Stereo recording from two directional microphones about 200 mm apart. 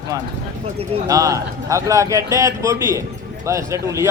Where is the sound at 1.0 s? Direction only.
15° right (ahead or behind).